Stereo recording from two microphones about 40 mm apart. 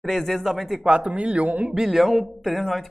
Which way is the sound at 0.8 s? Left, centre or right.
Right.